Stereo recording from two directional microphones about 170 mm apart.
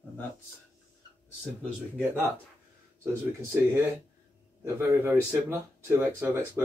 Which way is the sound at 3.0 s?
15° right (ahead or behind).